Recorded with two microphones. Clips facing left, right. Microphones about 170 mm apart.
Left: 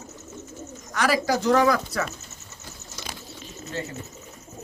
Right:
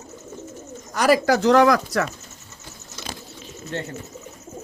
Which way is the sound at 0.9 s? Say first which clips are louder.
Right 5 dB; 40° right (ahead or behind).